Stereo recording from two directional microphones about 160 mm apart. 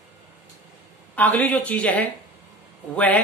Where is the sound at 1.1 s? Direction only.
10° left (ahead or behind).